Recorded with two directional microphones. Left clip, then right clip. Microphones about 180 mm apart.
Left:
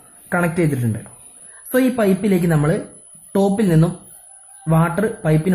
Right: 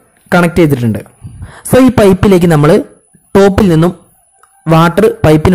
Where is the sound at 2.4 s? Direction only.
35° right (ahead or behind).